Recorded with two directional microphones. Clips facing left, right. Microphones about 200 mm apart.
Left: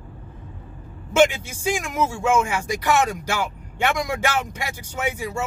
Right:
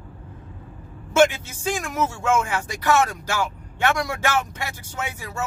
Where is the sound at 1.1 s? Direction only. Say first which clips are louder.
Even; 15° left (ahead or behind).